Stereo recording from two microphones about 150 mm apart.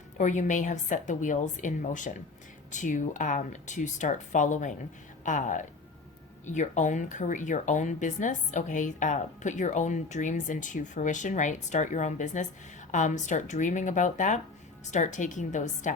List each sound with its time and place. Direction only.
0.2 s speech: 55° left (ahead or behind)